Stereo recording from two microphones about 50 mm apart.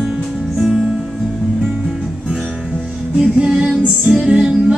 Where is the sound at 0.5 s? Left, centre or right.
Centre.